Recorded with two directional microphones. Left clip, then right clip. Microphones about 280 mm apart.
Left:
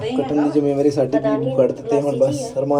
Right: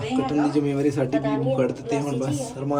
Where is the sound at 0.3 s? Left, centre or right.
Centre.